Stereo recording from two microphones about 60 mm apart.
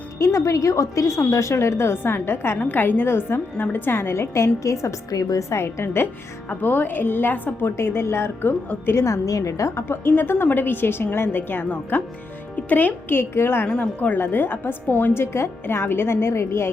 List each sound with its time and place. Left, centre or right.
0.2 s a woman's voice: left
2.6 s a woman's voice: left
6.5 s a woman's voice: left
7.9 s a woman's voice: left
9.0 s a woman's voice: left
9.9 s a woman's voice: left
13.7 s speech: left
14.2 s a woman's voice: left